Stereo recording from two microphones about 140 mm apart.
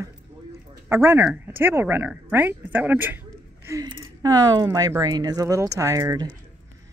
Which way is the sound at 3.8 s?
25° right (ahead or behind).